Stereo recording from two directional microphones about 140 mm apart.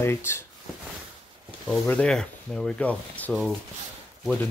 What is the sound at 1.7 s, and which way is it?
Speech, 10° left (ahead or behind).